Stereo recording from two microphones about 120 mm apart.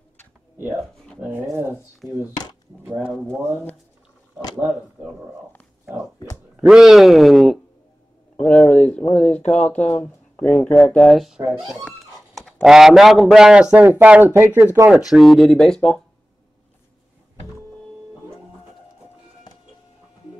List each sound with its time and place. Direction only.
1.2 s a man's voice: 20° right (ahead or behind)
6.7 s speech: 5° right (ahead or behind)
8.4 s a sound: 10° left (ahead or behind)
9.6 s speech: 10° left (ahead or behind)
11.0 s speech: centre (ahead or behind)
12.4 s a sound: 5° left (ahead or behind)
12.6 s a man's voice: 5° right (ahead or behind); by 15.0 s 20° right (ahead or behind)
15.0 s speech: centre (ahead or behind)
19.5 s music: 40° left (ahead or behind)